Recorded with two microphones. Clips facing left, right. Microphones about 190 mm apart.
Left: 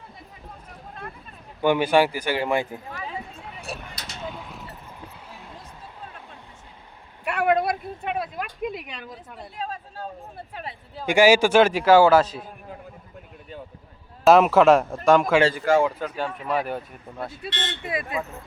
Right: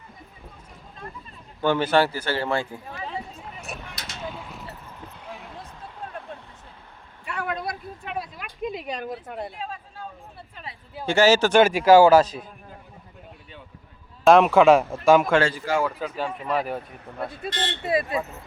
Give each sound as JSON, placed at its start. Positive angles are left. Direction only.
{"t": 1.6, "sound": "speech", "side_deg": 15}
{"t": 3.7, "sound": "a sound", "side_deg": 35}
{"t": 4.0, "sound": "a sound", "side_deg": 0}
{"t": 7.3, "sound": "a sound", "side_deg": 70}
{"t": 8.9, "sound": "a woman's voice", "side_deg": -50}
{"t": 9.6, "sound": "speech", "side_deg": 40}
{"t": 11.0, "sound": "speech", "side_deg": 15}
{"t": 11.6, "sound": "speech", "side_deg": -10}
{"t": 14.3, "sound": "speech", "side_deg": 0}
{"t": 17.3, "sound": "speech", "side_deg": -45}